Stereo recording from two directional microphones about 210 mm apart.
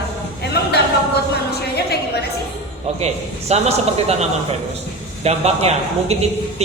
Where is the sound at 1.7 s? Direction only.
50° left (ahead or behind).